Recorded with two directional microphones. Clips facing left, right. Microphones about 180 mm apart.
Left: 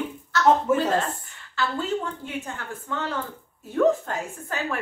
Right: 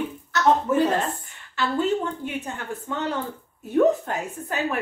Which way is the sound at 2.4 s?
20° right (ahead or behind).